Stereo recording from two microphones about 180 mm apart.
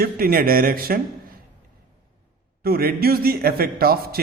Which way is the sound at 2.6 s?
55° right (ahead or behind).